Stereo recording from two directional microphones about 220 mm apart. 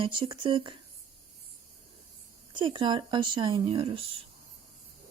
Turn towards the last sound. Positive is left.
turn(degrees=-25)  # may be behind; listen again after turning